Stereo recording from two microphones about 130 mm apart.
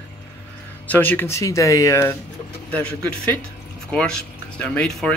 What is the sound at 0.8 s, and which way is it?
Speech, 15° left (ahead or behind).